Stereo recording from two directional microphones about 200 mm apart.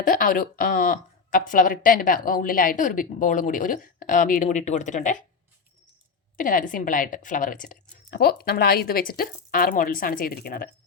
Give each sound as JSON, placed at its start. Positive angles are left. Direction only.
{"t": 0.0, "sound": "speech", "side_deg": 45}
{"t": 6.3, "sound": "speech", "side_deg": 45}